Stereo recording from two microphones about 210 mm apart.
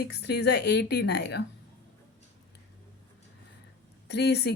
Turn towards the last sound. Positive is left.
turn(degrees=50)  # may be behind; listen again after turning